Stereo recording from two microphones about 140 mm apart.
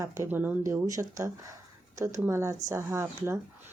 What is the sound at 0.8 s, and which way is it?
Speech, 25° right (ahead or behind).